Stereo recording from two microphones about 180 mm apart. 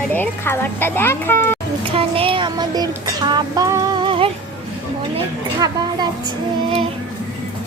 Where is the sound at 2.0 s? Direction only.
30° right (ahead or behind).